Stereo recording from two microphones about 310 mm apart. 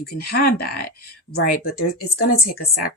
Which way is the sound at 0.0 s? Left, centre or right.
Left.